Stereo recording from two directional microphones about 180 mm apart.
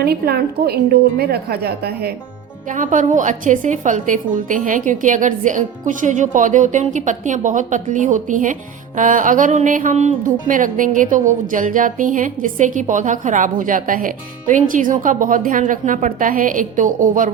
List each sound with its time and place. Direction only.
0.0 s speech: 60° right (ahead or behind)
2.6 s speech: 45° right (ahead or behind)